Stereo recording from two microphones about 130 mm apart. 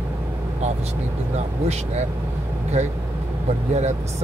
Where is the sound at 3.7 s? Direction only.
60° right (ahead or behind).